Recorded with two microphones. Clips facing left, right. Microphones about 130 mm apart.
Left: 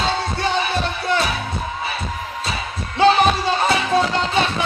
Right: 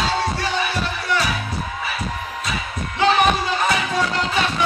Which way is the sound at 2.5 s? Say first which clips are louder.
Even; 30° left (ahead or behind).